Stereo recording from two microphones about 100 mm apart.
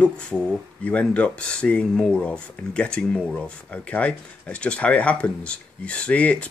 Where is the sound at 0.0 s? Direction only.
10° left (ahead or behind).